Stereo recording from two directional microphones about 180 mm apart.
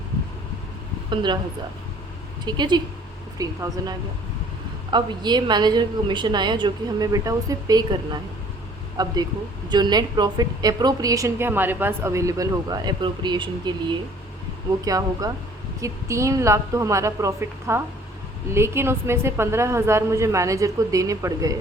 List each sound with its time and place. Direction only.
1.1 s a woman's voice: 25° right (ahead or behind)
2.4 s a woman's voice: 25° right (ahead or behind)